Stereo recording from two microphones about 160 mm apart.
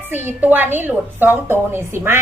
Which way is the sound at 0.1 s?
15° right (ahead or behind).